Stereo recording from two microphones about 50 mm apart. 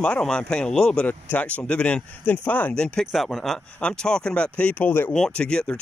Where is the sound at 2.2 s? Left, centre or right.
Left.